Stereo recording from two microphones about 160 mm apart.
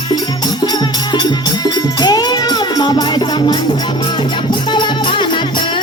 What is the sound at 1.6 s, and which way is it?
Music, 25° left (ahead or behind).